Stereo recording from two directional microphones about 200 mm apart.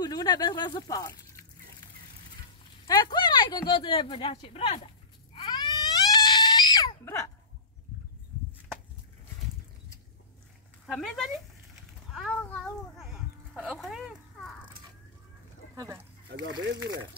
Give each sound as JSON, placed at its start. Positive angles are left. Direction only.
{"t": 0.0, "sound": "speech", "side_deg": 20}
{"t": 2.9, "sound": "speech", "side_deg": 20}
{"t": 5.3, "sound": "a sound", "side_deg": 25}
{"t": 10.9, "sound": "speech", "side_deg": 0}
{"t": 12.1, "sound": "a sound", "side_deg": 0}
{"t": 15.7, "sound": "speech", "side_deg": -15}
{"t": 16.3, "sound": "speech", "side_deg": -65}
{"t": 16.8, "sound": "speech", "side_deg": -20}